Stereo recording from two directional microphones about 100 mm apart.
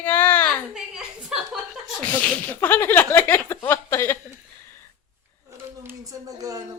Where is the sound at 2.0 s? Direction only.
15° left (ahead or behind).